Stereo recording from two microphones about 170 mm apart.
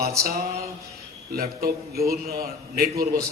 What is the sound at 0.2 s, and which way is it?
A man's voice, 65° right (ahead or behind).